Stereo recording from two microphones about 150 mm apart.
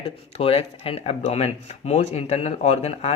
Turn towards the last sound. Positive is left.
turn(degrees=45)  # may be behind; listen again after turning